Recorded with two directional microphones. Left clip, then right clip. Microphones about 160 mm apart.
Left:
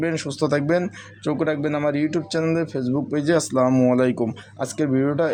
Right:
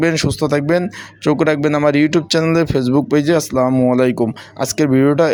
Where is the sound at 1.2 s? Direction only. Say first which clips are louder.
Right 8 dB; 35° right (ahead or behind).